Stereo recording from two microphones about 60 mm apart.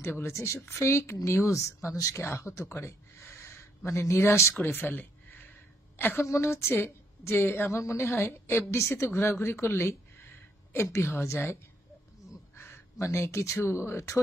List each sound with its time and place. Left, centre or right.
0.1 s a woman's voice: left
2.2 s speech: left
4.3 s a woman's voice: left
4.6 s a sound: left
5.9 s a woman's voice: left
6.2 s a woman's voice: left
12.5 s a sound: left
13.0 s a woman's voice: left